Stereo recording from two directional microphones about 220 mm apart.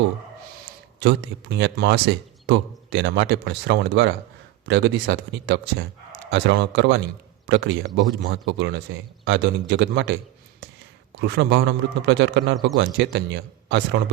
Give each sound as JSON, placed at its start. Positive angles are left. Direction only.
{"t": 0.9, "sound": "speech", "side_deg": -50}